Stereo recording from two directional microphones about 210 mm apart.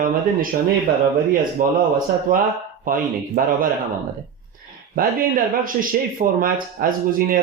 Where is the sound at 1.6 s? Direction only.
40° right (ahead or behind).